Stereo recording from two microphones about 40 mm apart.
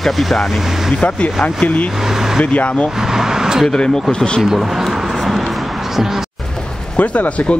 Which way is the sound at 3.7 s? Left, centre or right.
Centre.